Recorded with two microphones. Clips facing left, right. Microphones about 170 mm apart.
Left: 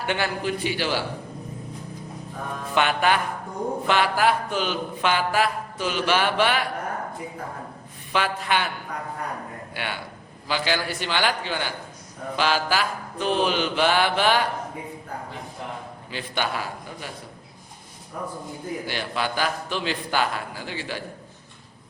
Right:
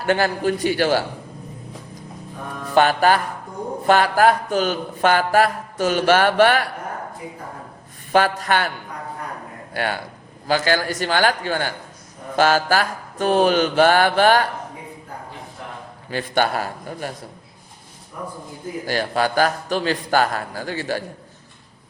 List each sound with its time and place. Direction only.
0.0 s a man's voice: 40° right (ahead or behind)
2.7 s music: 40° right (ahead or behind)
3.8 s a man's voice: 45° right (ahead or behind)
8.1 s a man's voice: 45° right (ahead or behind)
9.7 s a man's voice: 40° right (ahead or behind)
16.0 s a man's voice: 45° right (ahead or behind)
18.9 s a man's voice: 40° right (ahead or behind)